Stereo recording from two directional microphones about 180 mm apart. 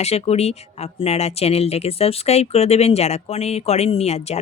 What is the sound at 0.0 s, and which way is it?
Speech, 35° left (ahead or behind).